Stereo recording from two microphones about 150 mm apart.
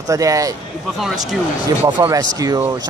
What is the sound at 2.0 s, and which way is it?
Speech, 25° right (ahead or behind).